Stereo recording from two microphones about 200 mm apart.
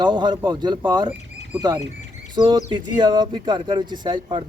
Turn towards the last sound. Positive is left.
turn(degrees=-25)  # may be behind; listen again after turning